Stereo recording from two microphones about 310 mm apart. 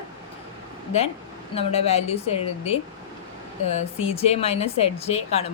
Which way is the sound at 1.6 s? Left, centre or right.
Centre.